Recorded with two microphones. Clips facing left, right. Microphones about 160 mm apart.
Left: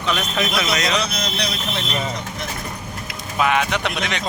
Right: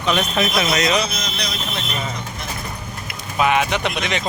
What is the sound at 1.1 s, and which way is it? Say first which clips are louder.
Speech: left 2 dB; 60° left (ahead or behind).